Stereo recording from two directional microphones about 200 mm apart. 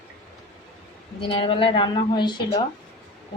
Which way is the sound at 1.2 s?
25° left (ahead or behind).